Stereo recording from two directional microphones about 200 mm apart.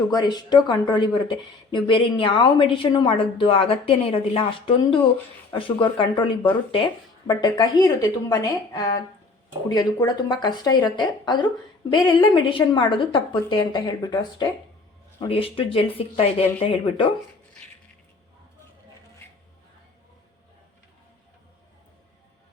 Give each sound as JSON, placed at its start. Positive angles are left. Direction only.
{"t": 0.1, "sound": "a woman's voice", "side_deg": 20}